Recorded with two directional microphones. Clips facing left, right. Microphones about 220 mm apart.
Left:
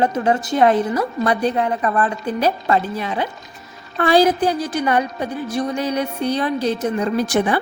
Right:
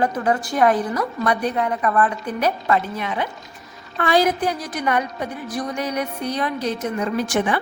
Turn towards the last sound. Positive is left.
turn(degrees=35)  # may be behind; listen again after turning